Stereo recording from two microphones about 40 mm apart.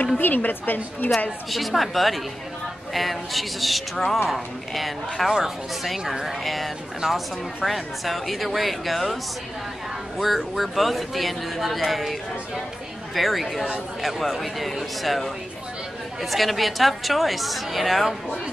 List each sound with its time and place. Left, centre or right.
0.2 s a woman's voice: left
1.5 s speech: centre
7.0 s speech: centre
7.6 s speech: centre